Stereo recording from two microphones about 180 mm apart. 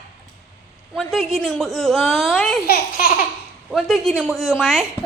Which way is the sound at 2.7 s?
50° left (ahead or behind).